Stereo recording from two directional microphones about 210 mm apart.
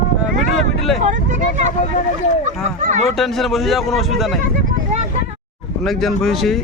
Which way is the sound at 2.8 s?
35° right (ahead or behind).